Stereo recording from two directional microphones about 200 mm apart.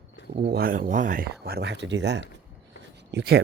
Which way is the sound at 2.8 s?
60° right (ahead or behind).